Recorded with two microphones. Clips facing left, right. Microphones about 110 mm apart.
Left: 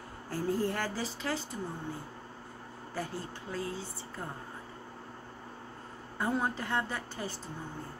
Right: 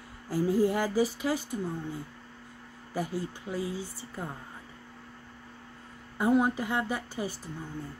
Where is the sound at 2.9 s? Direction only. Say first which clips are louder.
Right 5 dB; 15° right (ahead or behind).